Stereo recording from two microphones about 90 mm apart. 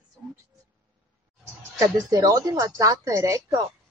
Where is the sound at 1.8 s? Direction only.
40° right (ahead or behind).